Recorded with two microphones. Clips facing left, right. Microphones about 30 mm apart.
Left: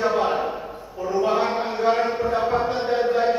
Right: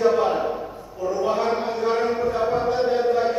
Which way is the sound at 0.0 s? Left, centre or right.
Centre.